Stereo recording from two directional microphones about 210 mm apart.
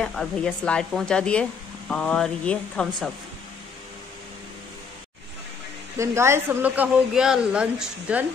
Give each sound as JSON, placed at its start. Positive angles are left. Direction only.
{"t": 0.0, "sound": "speech", "side_deg": 5}
{"t": 5.9, "sound": "a woman's voice", "side_deg": -10}